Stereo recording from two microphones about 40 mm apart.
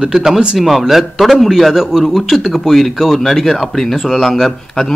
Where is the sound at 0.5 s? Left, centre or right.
Centre.